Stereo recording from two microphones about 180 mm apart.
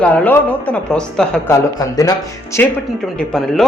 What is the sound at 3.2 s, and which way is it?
Speech, centre (ahead or behind).